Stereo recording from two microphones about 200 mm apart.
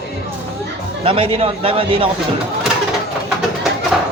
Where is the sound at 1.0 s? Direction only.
30° right (ahead or behind).